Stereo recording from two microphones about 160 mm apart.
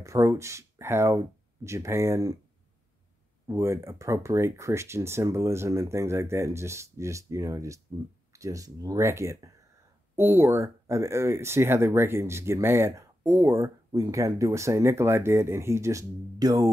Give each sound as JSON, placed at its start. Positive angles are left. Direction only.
{"t": 0.0, "sound": "speech", "side_deg": -20}
{"t": 3.4, "sound": "speech", "side_deg": -20}